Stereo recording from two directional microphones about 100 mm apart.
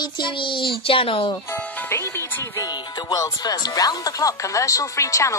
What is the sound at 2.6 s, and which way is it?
Speech, 40° left (ahead or behind).